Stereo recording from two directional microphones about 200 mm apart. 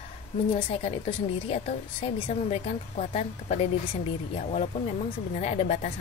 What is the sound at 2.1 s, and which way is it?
A woman's voice, 30° left (ahead or behind).